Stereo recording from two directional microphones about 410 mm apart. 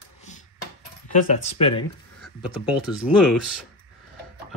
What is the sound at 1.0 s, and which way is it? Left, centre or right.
Speech, centre.